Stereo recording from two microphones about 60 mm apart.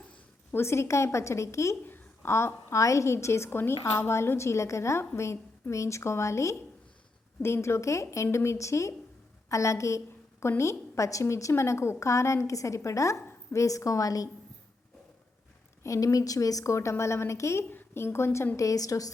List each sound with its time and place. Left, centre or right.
0.5 s a woman's voice: left
1.8 s a sound: left
2.3 s a woman's voice: left
15.8 s a woman's voice: left
17.7 s a woman's voice: left
18.5 s a woman's voice: left